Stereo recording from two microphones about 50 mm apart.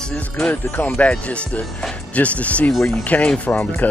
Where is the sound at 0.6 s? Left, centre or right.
Left.